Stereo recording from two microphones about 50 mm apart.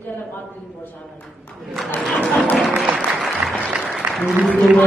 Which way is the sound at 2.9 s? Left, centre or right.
Centre.